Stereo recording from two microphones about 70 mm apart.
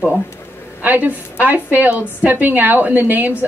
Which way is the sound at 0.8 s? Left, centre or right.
Right.